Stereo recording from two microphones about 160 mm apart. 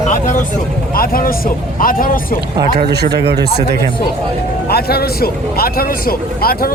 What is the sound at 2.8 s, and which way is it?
Speech, 85° right.